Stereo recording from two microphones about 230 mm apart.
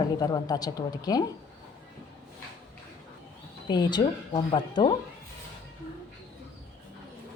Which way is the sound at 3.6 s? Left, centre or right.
Centre.